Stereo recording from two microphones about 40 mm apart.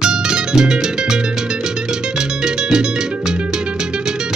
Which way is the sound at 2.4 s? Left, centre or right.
Centre.